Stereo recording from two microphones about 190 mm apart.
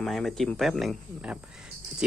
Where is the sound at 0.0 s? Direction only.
Centre (ahead or behind).